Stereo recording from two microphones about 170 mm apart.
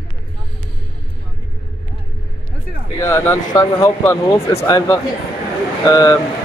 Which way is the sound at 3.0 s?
15° left (ahead or behind).